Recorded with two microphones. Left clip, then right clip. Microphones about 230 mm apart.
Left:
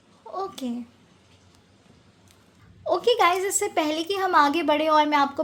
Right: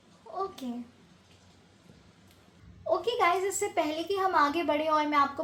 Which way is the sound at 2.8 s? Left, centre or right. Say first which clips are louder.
Left 6 dB; left.